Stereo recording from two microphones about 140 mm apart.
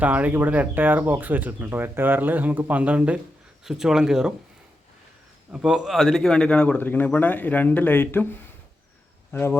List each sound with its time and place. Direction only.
0.0 s speech: 10° right (ahead or behind)
5.5 s a man's voice: 5° right (ahead or behind); by 9.6 s 15° left (ahead or behind)